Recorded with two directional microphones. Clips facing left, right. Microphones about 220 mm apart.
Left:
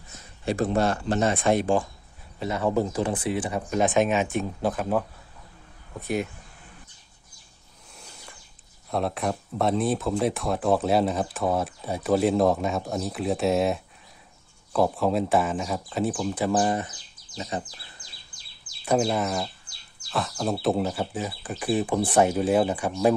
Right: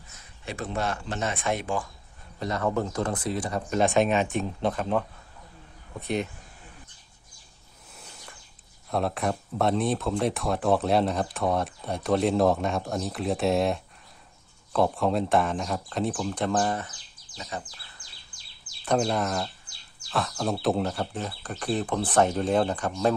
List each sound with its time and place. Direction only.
0.4 s speech: 35° left (ahead or behind)
2.4 s speech: 10° left (ahead or behind)
7.9 s a sound: centre (ahead or behind)
8.9 s speech: centre (ahead or behind); by 17.6 s 25° left (ahead or behind)
18.9 s speech: 5° left (ahead or behind)